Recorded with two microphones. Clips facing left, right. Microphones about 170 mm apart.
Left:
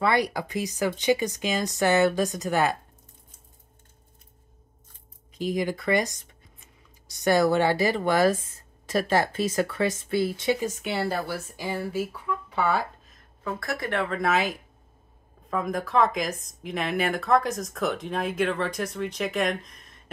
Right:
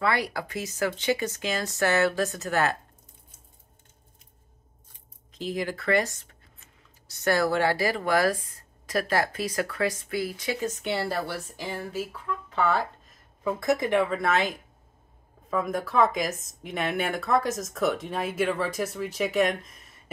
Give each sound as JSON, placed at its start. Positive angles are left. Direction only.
{"t": 0.0, "sound": "speech", "side_deg": 20}
{"t": 5.3, "sound": "speech", "side_deg": 15}
{"t": 10.6, "sound": "speech", "side_deg": 5}
{"t": 11.6, "sound": "speech", "side_deg": 10}
{"t": 12.4, "sound": "a sound", "side_deg": 10}
{"t": 13.4, "sound": "speech", "side_deg": -15}
{"t": 14.0, "sound": "speech", "side_deg": 0}
{"t": 15.5, "sound": "speech", "side_deg": 0}